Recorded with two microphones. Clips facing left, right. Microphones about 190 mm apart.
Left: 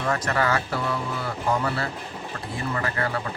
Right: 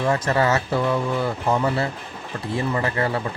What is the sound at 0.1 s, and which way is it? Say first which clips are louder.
A man's voice: right 2 dB; 25° right (ahead or behind).